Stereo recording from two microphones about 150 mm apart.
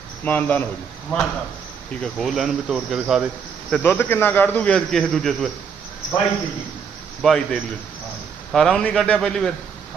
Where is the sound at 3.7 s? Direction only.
10° left (ahead or behind).